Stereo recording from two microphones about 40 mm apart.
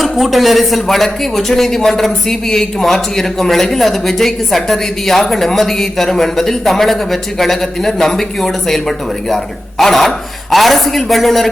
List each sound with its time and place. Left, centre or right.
0.0 s speech: centre